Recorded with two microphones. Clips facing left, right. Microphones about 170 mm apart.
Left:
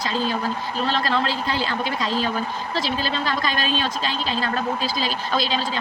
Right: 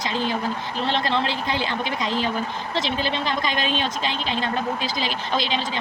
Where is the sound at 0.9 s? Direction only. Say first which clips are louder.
Even; 20° right (ahead or behind).